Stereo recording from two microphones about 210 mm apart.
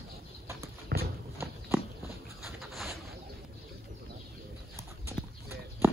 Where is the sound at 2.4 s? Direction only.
Centre (ahead or behind).